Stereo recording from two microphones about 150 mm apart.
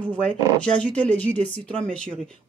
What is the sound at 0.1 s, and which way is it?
Speech, 5° left (ahead or behind).